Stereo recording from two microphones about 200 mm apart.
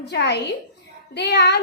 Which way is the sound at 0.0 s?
60° left (ahead or behind).